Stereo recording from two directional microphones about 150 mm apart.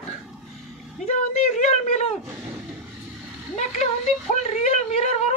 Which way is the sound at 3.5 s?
50° left (ahead or behind).